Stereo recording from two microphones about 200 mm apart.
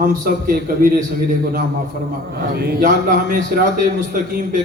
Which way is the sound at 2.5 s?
45° right (ahead or behind).